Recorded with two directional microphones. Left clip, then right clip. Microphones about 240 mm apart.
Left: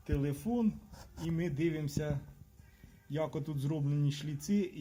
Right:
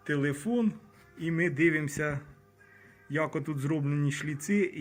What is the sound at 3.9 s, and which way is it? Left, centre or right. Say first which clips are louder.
Speech: right 6 dB; centre.